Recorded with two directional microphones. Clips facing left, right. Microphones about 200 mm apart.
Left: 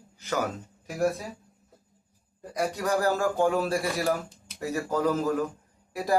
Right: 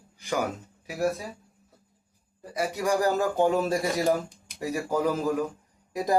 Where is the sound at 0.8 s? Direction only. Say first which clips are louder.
Left 1 dB; 5° right (ahead or behind).